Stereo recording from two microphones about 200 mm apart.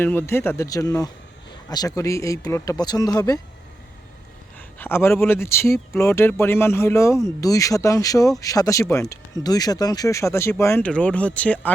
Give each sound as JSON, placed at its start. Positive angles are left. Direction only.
{"t": 0.0, "sound": "speech", "side_deg": 10}
{"t": 4.8, "sound": "speech", "side_deg": 10}